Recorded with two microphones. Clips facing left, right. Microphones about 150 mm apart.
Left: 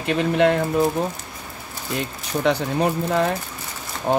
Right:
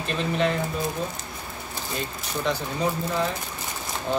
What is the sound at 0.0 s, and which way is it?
Speech, 65° left (ahead or behind).